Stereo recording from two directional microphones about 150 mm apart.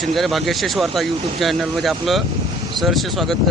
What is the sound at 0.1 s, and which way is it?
Speech, centre (ahead or behind).